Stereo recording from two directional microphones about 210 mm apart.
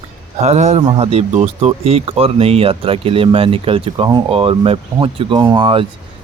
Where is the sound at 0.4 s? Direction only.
30° right (ahead or behind).